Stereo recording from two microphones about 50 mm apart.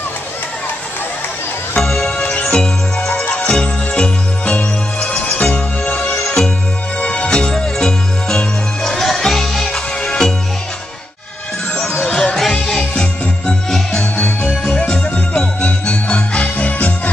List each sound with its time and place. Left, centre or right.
1.8 s music: centre
6.1 s music: centre
7.0 s music: left
12.0 s music: left
14.7 s jingle bell: left